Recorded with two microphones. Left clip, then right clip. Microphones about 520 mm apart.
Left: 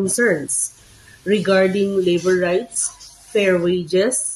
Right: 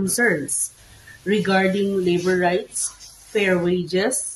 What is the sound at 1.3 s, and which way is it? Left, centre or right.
Speech, right.